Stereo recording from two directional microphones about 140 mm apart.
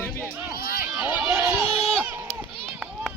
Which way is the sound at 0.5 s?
90° left.